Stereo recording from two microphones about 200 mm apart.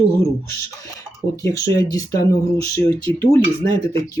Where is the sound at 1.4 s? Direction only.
15° left (ahead or behind).